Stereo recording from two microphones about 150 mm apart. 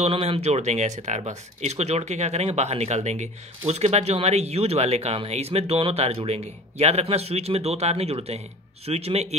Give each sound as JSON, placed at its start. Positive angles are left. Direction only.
{"t": 0.0, "sound": "speech", "side_deg": -40}